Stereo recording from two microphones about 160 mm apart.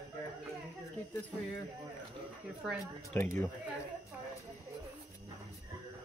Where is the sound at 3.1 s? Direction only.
15° left (ahead or behind).